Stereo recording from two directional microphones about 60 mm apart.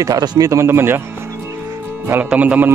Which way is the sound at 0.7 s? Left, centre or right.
Right.